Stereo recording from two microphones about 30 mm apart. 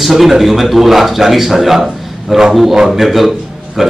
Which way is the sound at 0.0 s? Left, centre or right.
Centre.